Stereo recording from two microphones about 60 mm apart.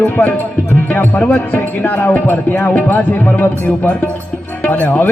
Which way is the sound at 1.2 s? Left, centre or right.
Left.